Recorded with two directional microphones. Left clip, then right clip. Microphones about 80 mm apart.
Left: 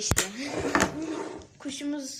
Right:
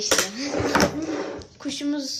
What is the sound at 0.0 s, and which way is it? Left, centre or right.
Speech, left.